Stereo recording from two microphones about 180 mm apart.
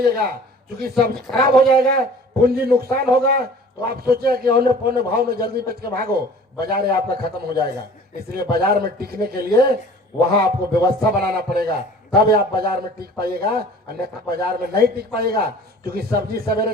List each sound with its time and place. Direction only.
0.0 s a man's voice: 55° right (ahead or behind)
10.8 s a man's voice: 60° right (ahead or behind)